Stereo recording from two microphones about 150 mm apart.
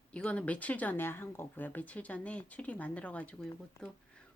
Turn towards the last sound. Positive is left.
turn(degrees=5)  # may be behind; listen again after turning